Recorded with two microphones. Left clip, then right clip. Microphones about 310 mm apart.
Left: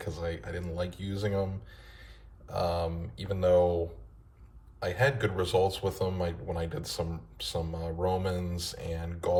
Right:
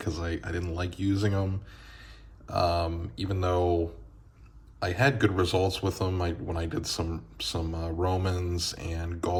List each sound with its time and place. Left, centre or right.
0.0 s a man's voice: centre
1.7 s a sound: centre
2.5 s a man's voice: centre
4.8 s a man's voice: centre